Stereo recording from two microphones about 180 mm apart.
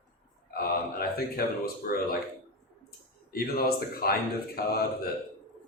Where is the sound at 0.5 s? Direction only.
55° left (ahead or behind).